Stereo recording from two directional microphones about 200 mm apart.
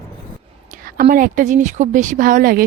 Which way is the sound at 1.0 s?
45° right (ahead or behind).